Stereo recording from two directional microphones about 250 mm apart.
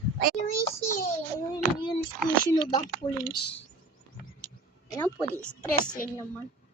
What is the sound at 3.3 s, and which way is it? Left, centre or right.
Speech, left.